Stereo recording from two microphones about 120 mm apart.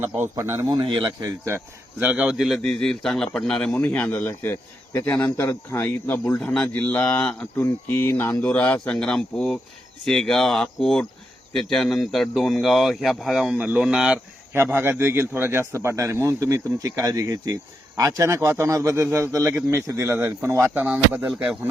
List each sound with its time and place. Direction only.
0.0 s a man's voice: 20° right (ahead or behind)
0.7 s a man's voice: 40° right (ahead or behind)
1.5 s speech: 15° right (ahead or behind); by 6.4 s 20° left (ahead or behind)
6.4 s speech: 5° left (ahead or behind)
14.5 s a man's voice: 20° right (ahead or behind)